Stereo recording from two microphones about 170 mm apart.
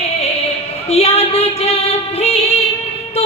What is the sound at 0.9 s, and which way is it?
Female singing, 40° left (ahead or behind).